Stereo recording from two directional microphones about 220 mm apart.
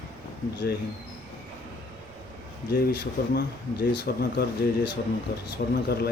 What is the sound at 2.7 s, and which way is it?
Speech, 50° left (ahead or behind).